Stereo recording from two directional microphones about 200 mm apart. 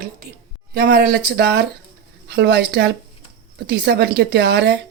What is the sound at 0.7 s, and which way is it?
Speech, 50° right (ahead or behind).